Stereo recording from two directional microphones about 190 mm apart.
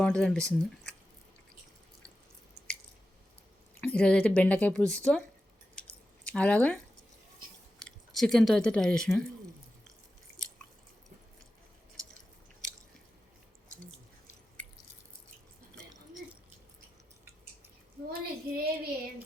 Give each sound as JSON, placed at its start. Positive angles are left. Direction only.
{"t": 0.0, "sound": "speech", "side_deg": 5}
{"t": 3.8, "sound": "speech", "side_deg": 5}
{"t": 6.2, "sound": "speech", "side_deg": 5}
{"t": 7.8, "sound": "speech", "side_deg": 0}
{"t": 18.1, "sound": "a sound", "side_deg": -55}